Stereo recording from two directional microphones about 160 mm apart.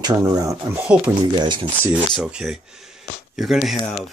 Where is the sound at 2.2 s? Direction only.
5° right (ahead or behind).